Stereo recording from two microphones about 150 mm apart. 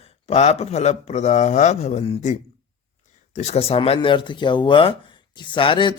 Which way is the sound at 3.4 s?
45° left (ahead or behind).